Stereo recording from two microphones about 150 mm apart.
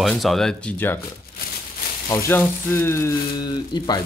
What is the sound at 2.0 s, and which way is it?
Speech, 15° left (ahead or behind).